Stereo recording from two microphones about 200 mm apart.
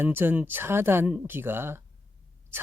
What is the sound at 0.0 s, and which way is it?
Speech, 10° right (ahead or behind).